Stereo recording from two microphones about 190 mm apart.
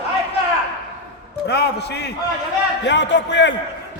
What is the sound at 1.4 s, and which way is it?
A man's voice, 60° left (ahead or behind).